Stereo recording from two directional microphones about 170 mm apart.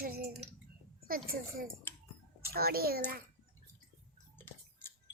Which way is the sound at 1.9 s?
15° left (ahead or behind).